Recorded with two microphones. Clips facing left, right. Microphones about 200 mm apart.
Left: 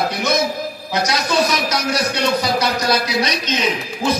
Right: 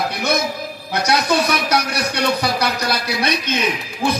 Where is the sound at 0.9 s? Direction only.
60° right (ahead or behind).